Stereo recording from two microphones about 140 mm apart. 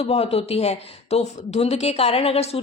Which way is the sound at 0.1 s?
45° left (ahead or behind).